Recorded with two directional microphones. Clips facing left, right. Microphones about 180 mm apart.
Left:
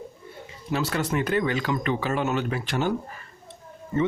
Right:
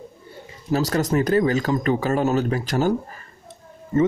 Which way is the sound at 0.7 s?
40° right (ahead or behind).